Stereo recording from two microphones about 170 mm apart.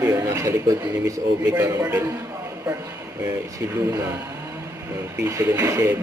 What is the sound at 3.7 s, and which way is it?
Speech, 15° right (ahead or behind).